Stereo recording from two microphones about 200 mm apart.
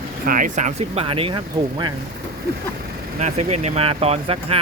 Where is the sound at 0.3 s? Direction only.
40° right (ahead or behind).